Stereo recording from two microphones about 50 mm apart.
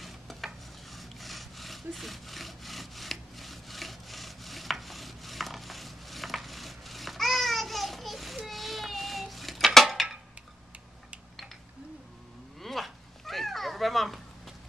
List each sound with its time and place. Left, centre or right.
0.0 s stir: centre
0.9 s sawing: centre
12.5 s a sound: centre